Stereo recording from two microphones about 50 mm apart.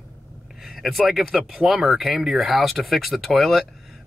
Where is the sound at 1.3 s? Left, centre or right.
Centre.